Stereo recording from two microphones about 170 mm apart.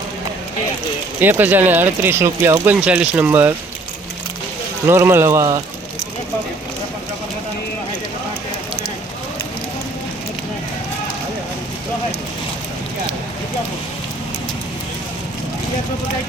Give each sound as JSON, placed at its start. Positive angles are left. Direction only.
{"t": 1.2, "sound": "speech", "side_deg": -10}
{"t": 4.9, "sound": "speech", "side_deg": -15}